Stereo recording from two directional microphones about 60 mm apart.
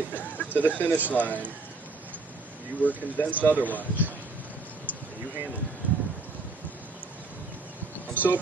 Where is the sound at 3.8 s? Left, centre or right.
Right.